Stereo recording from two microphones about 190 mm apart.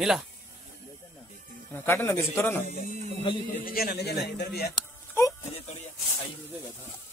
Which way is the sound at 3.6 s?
55° left (ahead or behind).